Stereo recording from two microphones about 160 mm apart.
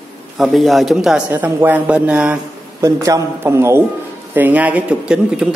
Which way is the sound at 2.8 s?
20° right (ahead or behind).